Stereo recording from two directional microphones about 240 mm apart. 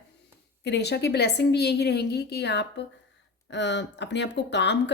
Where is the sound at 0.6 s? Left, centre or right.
Left.